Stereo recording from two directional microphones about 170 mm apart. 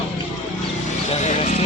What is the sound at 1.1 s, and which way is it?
Speech, 40° left (ahead or behind).